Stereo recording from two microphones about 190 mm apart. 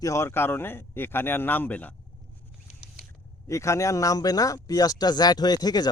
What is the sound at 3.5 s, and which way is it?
Speech, 15° left (ahead or behind).